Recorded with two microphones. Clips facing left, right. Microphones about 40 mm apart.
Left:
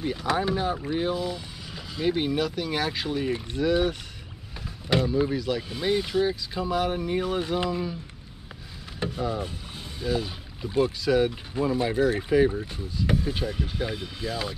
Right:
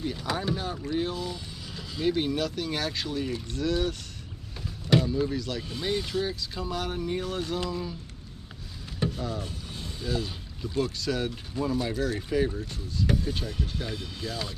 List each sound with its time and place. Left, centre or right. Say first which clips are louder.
0.0 s speech: left 4 dB; centre
4.9 s speech: left 1 dB; centre
9.0 s speech: left 3 dB; centre
9.9 s pour: left 4 dB; centre
10.7 s speech: left 6 dB; centre